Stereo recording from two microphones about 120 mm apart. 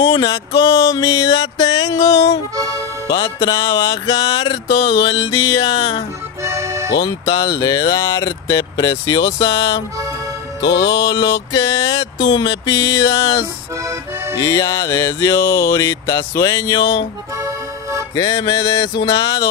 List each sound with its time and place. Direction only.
0.0 s speech: 25° left (ahead or behind)
2.5 s speech: 30° right (ahead or behind)
3.1 s speech: 35° left (ahead or behind)
6.4 s music: 25° right (ahead or behind)
7.0 s speech: 35° left (ahead or behind)
11.1 s speech: 30° left (ahead or behind)
13.8 s music: 25° right (ahead or behind)
14.4 s speech: 30° left (ahead or behind)
17.4 s accordion: 25° right (ahead or behind)
18.1 s speech: 30° left (ahead or behind)